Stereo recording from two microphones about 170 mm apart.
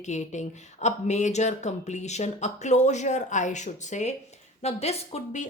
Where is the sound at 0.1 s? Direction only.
45° left (ahead or behind).